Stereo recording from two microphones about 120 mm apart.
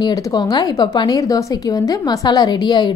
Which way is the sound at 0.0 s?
30° left (ahead or behind).